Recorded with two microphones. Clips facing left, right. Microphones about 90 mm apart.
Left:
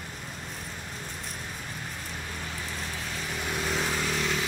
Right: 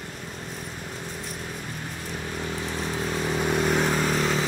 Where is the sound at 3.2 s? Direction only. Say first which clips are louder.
Right 8 dB; 55° right (ahead or behind).